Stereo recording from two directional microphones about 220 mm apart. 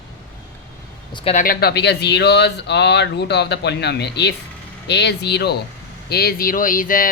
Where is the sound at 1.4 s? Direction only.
45° left (ahead or behind).